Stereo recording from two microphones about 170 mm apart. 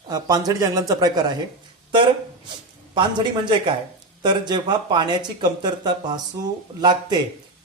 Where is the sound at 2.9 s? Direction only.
25° right (ahead or behind).